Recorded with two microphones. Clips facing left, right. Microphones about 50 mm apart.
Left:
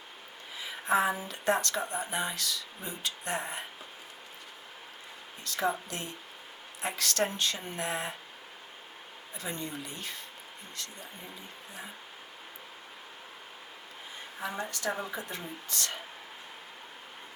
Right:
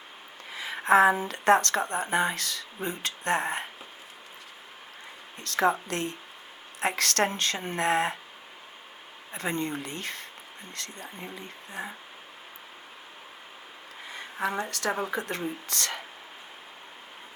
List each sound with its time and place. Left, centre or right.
0.5 s a sound: right
1.1 s speech: right
5.4 s a woman's voice: right
9.3 s a woman's voice: right
14.1 s a woman's voice: right